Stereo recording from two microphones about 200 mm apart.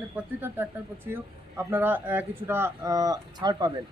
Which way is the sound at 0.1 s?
10° right (ahead or behind).